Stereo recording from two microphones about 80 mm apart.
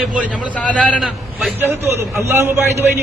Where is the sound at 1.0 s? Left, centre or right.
Centre.